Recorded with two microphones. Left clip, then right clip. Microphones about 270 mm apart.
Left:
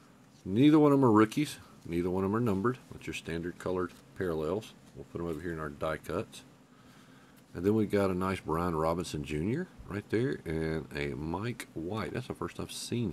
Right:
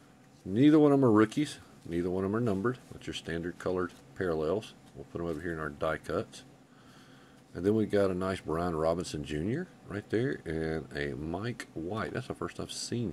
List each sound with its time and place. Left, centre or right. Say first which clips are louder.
0.6 s speech: even; centre
7.5 s speech: right 1 dB; centre
12.6 s speech: right 2 dB; left